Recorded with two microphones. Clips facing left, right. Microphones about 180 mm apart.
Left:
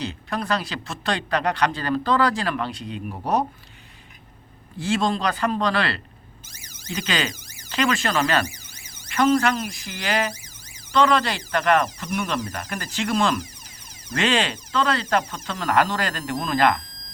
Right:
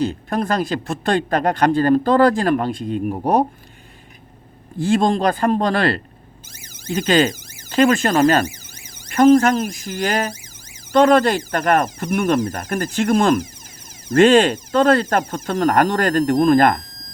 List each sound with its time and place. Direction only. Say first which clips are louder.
0.0 s speech: right 8 dB; 50° right (ahead or behind)
4.8 s speech: right 6 dB; 50° right (ahead or behind)